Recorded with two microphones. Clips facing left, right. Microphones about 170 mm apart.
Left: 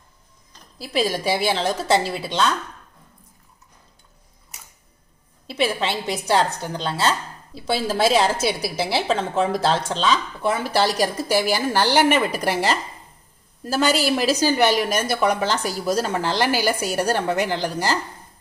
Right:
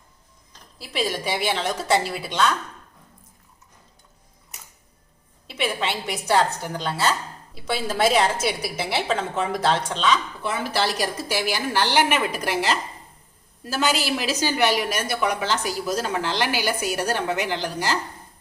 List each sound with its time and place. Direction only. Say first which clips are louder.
0.8 s a woman's voice: left 4 dB; 40° left (ahead or behind)
5.5 s a woman's voice: left 3 dB; 35° left (ahead or behind)
13.7 s a woman's voice: left 4 dB; 40° left (ahead or behind)